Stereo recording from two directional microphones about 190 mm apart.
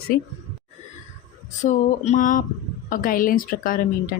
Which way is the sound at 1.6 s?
40° left (ahead or behind).